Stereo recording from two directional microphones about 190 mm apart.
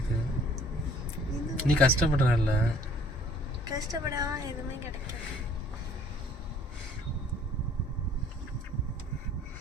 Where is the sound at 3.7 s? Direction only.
20° right (ahead or behind).